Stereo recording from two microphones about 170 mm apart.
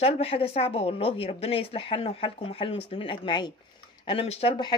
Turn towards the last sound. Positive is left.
turn(degrees=35)  # may be behind; listen again after turning